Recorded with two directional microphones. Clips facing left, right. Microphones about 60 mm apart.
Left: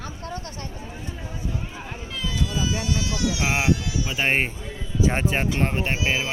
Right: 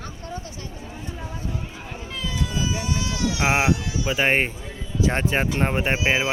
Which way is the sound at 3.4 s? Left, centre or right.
Right.